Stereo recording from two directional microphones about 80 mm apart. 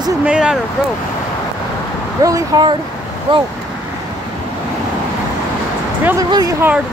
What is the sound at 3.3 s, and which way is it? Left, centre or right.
Speech, right.